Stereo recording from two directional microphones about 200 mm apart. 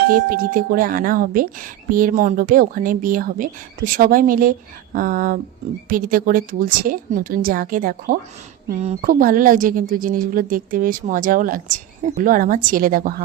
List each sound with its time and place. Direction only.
0.1 s speech: 45° right (ahead or behind)
8.7 s speech: 30° right (ahead or behind)